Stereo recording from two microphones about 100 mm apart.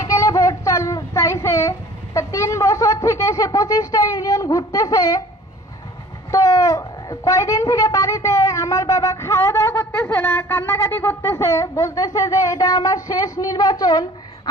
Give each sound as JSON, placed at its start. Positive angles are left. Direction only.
{"t": 0.0, "sound": "child singing", "side_deg": 35}
{"t": 2.1, "sound": "speech", "side_deg": 30}
{"t": 6.3, "sound": "speech", "side_deg": 35}